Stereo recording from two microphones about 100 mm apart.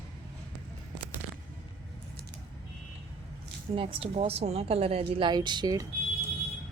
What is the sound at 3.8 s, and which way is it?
A woman's voice, 65° right (ahead or behind).